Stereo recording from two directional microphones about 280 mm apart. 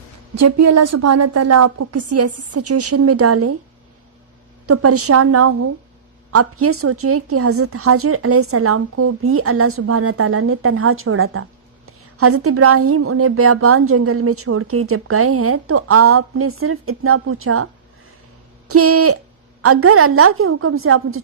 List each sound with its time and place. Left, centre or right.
0.3 s a woman's voice: right
4.6 s a woman's voice: right
18.7 s a woman's voice: right